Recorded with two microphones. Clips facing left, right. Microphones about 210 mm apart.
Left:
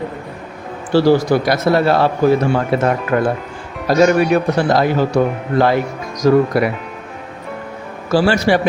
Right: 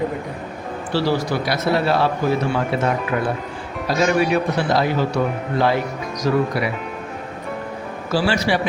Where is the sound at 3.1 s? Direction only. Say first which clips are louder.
Left 5 dB; 50° left (ahead or behind).